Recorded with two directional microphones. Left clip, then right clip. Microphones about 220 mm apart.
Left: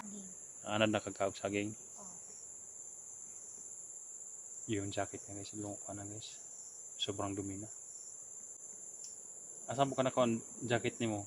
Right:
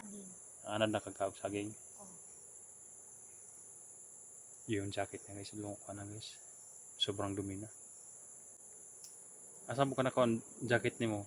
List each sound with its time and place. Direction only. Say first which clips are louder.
0.6 s speech: left 2 dB; 35° left (ahead or behind)
4.6 s speech: even; 5° right (ahead or behind)
9.6 s speech: left 1 dB; 15° right (ahead or behind)